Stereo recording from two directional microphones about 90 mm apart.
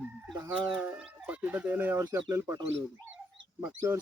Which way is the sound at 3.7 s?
35° right (ahead or behind).